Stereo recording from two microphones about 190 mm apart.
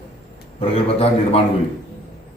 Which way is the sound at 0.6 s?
30° left (ahead or behind).